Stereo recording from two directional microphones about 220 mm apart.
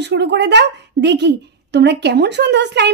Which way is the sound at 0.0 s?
50° right (ahead or behind).